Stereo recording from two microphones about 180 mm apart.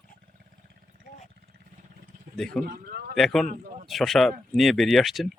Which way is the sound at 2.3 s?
5° left (ahead or behind).